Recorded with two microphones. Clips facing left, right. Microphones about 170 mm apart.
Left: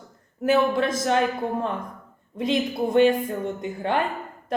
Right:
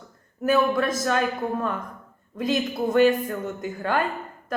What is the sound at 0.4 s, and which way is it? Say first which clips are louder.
Speech: left 1 dB; 25° left (ahead or behind).